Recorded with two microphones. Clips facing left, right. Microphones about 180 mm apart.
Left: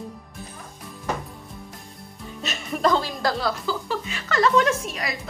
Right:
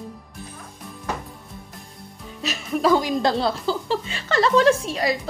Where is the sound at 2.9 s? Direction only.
20° right (ahead or behind).